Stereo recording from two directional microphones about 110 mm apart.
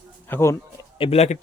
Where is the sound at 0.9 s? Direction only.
60° left (ahead or behind).